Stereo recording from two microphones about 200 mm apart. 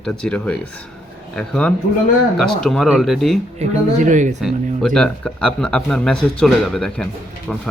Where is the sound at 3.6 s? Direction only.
35° right (ahead or behind).